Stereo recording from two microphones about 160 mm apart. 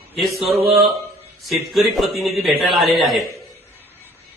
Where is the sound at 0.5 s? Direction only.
40° right (ahead or behind).